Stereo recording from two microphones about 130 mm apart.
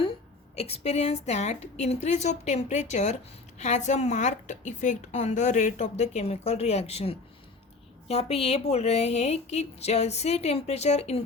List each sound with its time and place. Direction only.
0.0 s a woman's voice: 50° left (ahead or behind)